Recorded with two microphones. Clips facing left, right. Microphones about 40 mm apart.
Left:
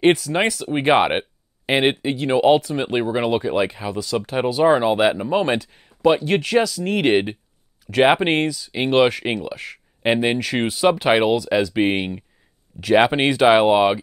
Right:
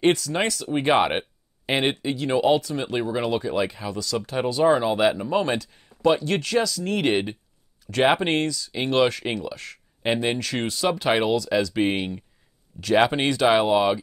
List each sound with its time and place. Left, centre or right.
0.0 s speech: centre